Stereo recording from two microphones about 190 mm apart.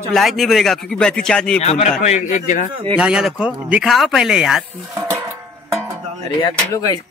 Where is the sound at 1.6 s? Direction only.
35° left (ahead or behind).